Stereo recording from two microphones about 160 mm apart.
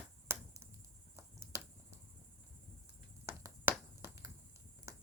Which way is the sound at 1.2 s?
15° right (ahead or behind).